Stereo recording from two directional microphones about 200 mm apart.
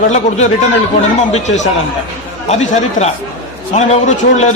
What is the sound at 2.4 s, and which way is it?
A man's voice, 35° left (ahead or behind).